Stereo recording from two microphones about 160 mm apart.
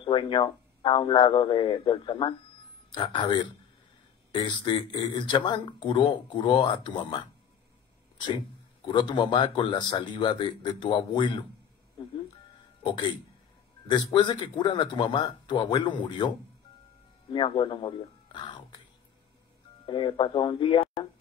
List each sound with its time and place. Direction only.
0.0 s speech: 30° left (ahead or behind)
8.8 s speech: 30° left (ahead or behind)
12.8 s speech: 30° left (ahead or behind)
19.9 s speech: 30° left (ahead or behind)